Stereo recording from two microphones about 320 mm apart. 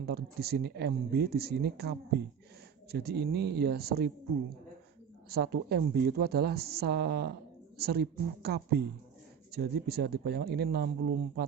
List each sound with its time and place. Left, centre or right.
0.0 s speech: right